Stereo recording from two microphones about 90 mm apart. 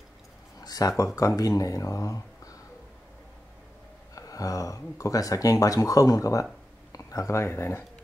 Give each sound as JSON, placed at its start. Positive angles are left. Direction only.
{"t": 0.7, "sound": "speech", "side_deg": 45}
{"t": 4.1, "sound": "speech", "side_deg": 40}